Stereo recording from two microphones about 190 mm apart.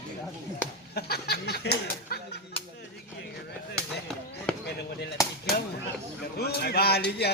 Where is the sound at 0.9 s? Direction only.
55° left (ahead or behind).